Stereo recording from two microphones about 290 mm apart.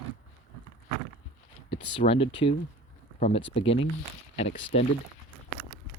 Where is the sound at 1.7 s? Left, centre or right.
Centre.